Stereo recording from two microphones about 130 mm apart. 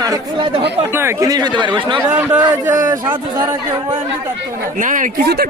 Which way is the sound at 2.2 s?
15° right (ahead or behind).